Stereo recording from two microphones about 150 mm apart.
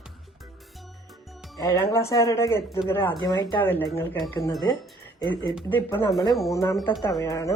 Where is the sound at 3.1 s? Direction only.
30° left (ahead or behind).